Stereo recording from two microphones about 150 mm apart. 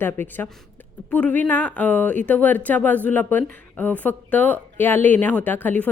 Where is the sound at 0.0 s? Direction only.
15° left (ahead or behind).